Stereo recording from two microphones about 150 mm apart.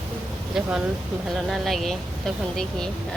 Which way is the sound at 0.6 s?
5° right (ahead or behind).